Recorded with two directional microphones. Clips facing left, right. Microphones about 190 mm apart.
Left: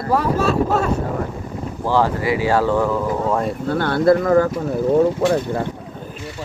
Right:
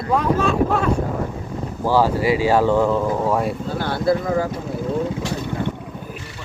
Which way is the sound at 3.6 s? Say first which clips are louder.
Left 9 dB; 60° left (ahead or behind).